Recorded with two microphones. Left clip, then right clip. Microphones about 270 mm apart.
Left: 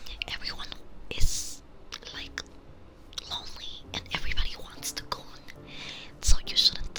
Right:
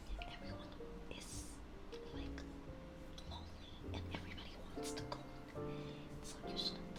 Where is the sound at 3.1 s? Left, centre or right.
Left.